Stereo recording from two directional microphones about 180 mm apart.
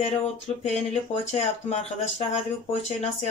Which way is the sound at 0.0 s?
40° left (ahead or behind).